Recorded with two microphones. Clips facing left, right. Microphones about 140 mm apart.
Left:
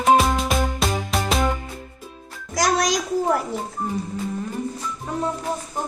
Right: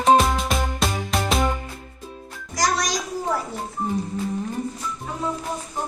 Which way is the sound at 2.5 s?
90° left.